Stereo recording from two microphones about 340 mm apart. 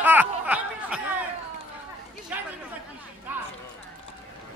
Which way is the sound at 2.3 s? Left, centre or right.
Centre.